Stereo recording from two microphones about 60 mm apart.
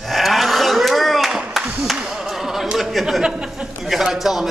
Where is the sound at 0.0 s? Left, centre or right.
Centre.